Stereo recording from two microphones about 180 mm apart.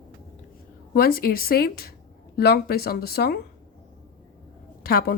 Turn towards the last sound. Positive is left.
turn(degrees=55)  # may be behind; listen again after turning